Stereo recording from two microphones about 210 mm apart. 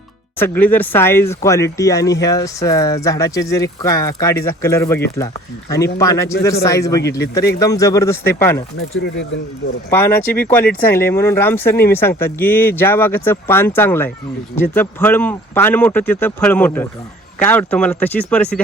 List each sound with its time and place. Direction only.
0.3 s speech: 10° left (ahead or behind)
8.8 s speech: 70° left (ahead or behind)
9.9 s speech: 10° left (ahead or behind)